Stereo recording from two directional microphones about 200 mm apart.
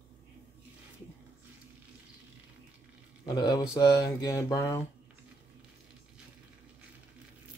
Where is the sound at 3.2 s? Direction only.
20° left (ahead or behind).